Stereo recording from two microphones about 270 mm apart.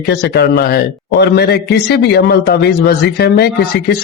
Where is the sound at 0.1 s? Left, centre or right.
Left.